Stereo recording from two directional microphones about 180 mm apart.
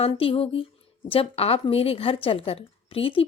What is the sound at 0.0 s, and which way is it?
A woman's voice, 30° left (ahead or behind).